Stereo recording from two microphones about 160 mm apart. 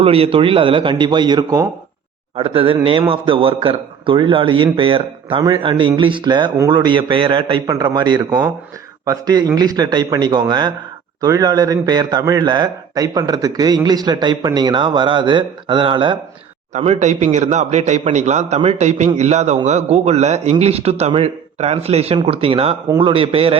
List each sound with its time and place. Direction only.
0.0 s a man's voice: 35° right (ahead or behind)
2.3 s a man's voice: 35° right (ahead or behind)
16.7 s a man's voice: 45° right (ahead or behind)